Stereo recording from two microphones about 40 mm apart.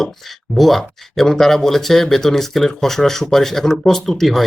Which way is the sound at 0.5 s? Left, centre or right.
Centre.